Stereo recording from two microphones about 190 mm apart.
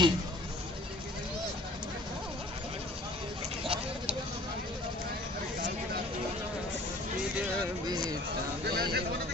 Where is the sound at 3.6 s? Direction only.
30° right (ahead or behind).